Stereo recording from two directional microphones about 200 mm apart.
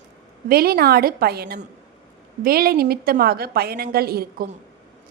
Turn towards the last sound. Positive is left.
turn(degrees=-50)  # may be behind; listen again after turning